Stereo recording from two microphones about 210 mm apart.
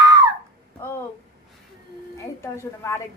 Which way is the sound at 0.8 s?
10° left (ahead or behind).